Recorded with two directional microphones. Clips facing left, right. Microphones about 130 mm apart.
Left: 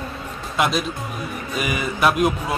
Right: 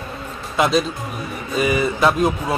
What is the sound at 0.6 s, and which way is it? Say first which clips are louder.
Speech: right 4 dB; centre (ahead or behind).